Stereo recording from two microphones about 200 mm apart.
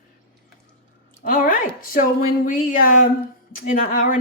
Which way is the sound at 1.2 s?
45° left (ahead or behind).